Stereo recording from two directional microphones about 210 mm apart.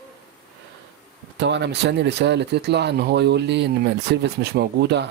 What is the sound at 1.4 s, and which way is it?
Speech, 55° right (ahead or behind).